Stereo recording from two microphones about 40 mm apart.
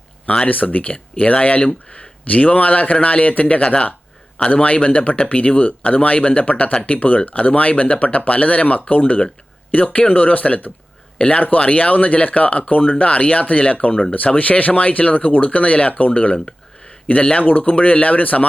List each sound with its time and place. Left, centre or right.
0.4 s speech: left
3.6 s a man's voice: left
11.2 s a man's voice: left
17.4 s speech: left